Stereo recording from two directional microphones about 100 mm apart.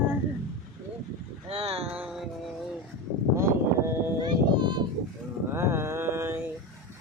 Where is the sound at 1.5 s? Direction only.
80° right.